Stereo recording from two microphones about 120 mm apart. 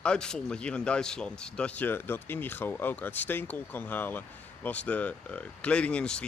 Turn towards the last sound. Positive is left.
turn(degrees=10)  # may be behind; listen again after turning